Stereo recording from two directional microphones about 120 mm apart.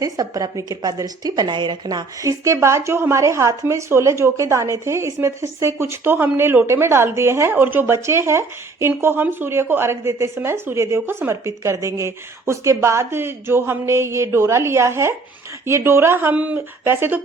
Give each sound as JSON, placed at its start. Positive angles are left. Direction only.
{"t": 0.0, "sound": "speech", "side_deg": -30}